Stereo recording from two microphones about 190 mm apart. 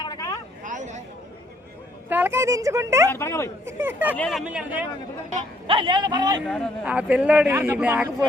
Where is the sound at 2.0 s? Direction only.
10° right (ahead or behind).